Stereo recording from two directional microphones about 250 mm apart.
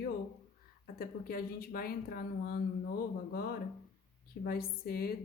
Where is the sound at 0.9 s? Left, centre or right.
Left.